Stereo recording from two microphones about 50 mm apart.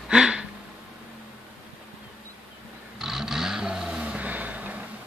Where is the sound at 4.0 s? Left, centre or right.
Right.